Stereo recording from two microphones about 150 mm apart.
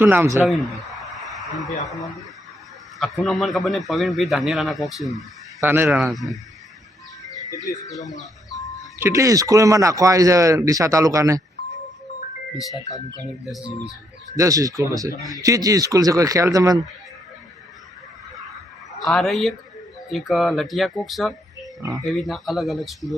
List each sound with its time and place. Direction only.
0.0 s speech: 15° right (ahead or behind)
1.1 s a sound: centre (ahead or behind)
3.0 s speech: centre (ahead or behind)
5.5 s speech: 15° right (ahead or behind)
6.0 s speech: centre (ahead or behind)
7.3 s music: 25° left (ahead or behind)
9.0 s speech: 20° right (ahead or behind)
12.7 s speech: 25° left (ahead or behind)
14.3 s speech: 20° right (ahead or behind)
19.0 s speech: centre (ahead or behind)